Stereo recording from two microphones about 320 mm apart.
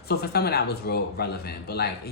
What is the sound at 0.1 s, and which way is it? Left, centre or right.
A man's voice, left.